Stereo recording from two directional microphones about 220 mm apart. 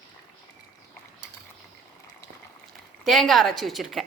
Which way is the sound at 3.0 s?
Centre (ahead or behind).